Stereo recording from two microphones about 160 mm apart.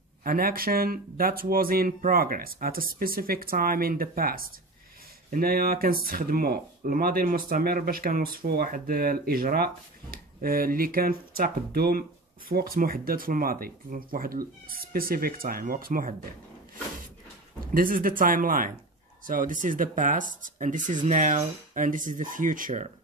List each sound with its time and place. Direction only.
0.2 s speech: 65° right (ahead or behind)
17.7 s speech: 65° right (ahead or behind)